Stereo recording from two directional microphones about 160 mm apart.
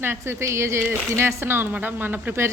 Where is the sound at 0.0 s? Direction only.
15° right (ahead or behind).